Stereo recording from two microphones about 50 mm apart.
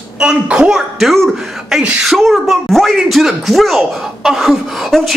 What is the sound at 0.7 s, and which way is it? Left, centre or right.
Speech, centre.